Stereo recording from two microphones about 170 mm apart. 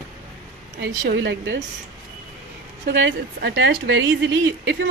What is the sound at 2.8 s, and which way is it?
A woman's voice, 90° right.